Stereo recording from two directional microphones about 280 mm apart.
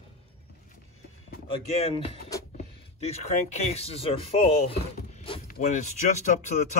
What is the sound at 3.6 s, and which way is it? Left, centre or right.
Speech, left.